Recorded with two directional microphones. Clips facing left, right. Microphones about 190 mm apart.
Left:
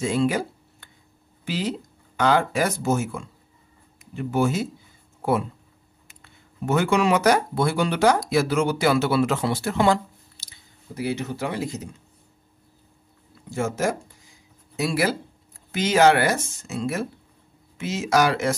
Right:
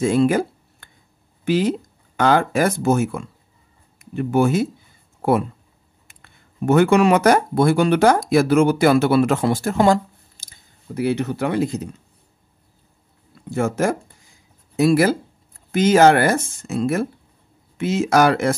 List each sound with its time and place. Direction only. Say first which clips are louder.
0.0 s speech: right 6 dB; 50° right (ahead or behind)
6.0 s speech: even; 55° right (ahead or behind)
13.5 s speech: right 4 dB; 55° right (ahead or behind)